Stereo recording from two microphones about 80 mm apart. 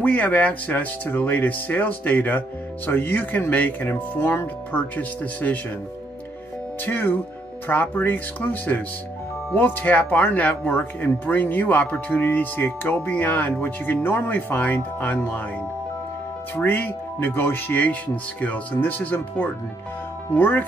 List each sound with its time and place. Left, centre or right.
0.0 s speech: left
6.8 s speech: left
16.5 s speech: left